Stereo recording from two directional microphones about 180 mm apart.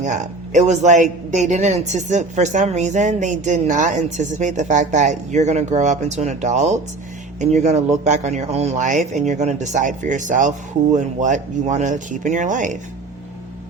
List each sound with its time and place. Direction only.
0.0 s speech: 40° right (ahead or behind)